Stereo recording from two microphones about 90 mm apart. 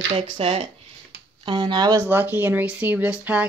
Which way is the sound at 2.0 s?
25° right (ahead or behind).